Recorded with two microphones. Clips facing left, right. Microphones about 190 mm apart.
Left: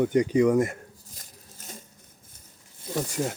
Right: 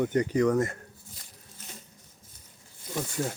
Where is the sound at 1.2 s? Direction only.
40° left (ahead or behind).